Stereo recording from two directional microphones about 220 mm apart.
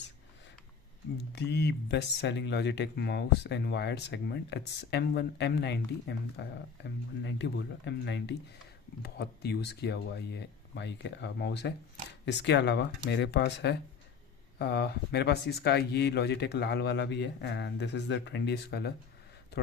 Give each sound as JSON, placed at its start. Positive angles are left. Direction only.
{"t": 1.3, "sound": "speech", "side_deg": 50}